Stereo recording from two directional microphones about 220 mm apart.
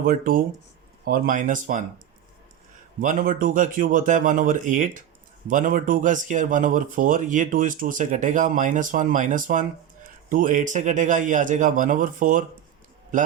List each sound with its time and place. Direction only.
0.0 s speech: 40° right (ahead or behind)
3.0 s speech: 40° right (ahead or behind)